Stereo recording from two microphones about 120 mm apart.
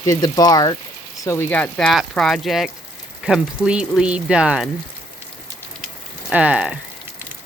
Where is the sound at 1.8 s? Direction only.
5° left (ahead or behind).